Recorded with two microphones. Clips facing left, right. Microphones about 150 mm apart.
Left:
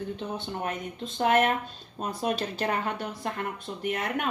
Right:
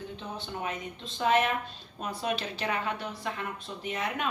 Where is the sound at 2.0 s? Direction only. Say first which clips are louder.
Left 3 dB; 45° left (ahead or behind).